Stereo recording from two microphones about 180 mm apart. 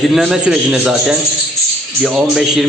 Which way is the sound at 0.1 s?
Centre (ahead or behind).